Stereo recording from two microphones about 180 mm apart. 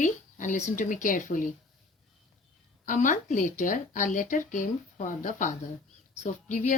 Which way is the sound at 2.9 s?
45° left (ahead or behind).